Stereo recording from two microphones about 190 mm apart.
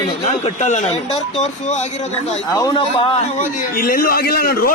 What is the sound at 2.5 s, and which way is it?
Speech, 25° left (ahead or behind).